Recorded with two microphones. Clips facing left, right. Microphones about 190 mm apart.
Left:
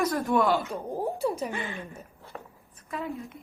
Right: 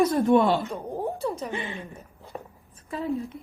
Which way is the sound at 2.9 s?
35° right (ahead or behind).